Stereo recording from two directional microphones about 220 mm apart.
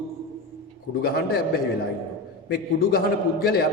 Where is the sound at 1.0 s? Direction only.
45° left (ahead or behind).